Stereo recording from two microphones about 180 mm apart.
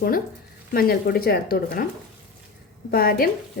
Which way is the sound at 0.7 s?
55° left (ahead or behind).